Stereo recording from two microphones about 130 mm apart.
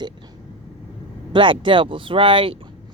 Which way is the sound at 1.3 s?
40° right (ahead or behind).